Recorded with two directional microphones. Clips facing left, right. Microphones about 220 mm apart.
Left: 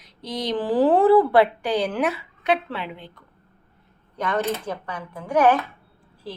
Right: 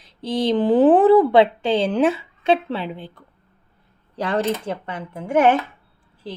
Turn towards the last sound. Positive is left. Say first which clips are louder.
# right 2 dB
turn(degrees=-25)  # may be behind; listen again after turning